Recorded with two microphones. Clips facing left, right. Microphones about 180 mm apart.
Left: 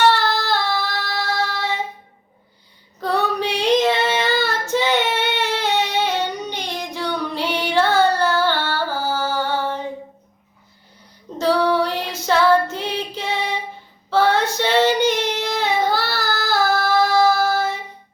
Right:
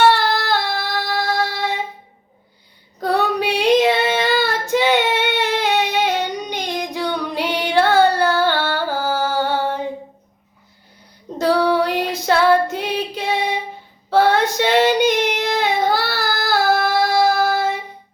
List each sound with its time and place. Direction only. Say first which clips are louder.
0.1 s child singing: right 2 dB; 15° right (ahead or behind)
3.0 s child singing: right 2 dB; 15° right (ahead or behind)
9.4 s a sound: right 2 dB; 15° right (ahead or behind)
11.3 s female singing: right 1 dB; 15° right (ahead or behind)
12.7 s music: right 3 dB; 15° right (ahead or behind)
14.1 s female singing: right 2 dB; 15° right (ahead or behind)